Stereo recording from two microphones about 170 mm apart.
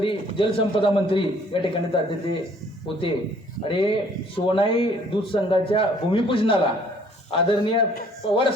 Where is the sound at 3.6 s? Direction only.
30° left (ahead or behind).